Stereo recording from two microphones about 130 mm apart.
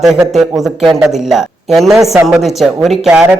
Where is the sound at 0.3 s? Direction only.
Centre (ahead or behind).